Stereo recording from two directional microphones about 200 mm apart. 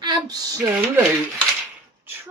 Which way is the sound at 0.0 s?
20° right (ahead or behind).